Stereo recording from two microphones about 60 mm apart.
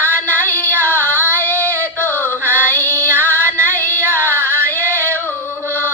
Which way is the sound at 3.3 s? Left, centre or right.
Right.